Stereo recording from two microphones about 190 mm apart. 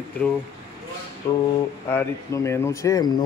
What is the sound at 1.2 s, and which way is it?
Speech, 15° left (ahead or behind).